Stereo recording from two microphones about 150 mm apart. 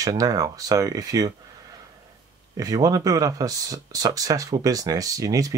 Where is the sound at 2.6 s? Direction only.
25° right (ahead or behind).